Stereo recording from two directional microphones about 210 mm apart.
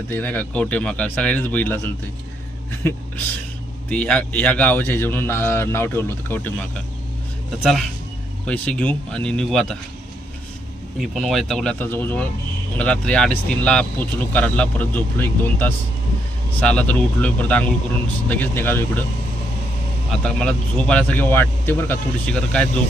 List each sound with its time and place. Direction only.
0.1 s speech: 10° left (ahead or behind)
3.8 s speech: 5° left (ahead or behind)
11.0 s speech: centre (ahead or behind)
20.2 s speech: 5° left (ahead or behind)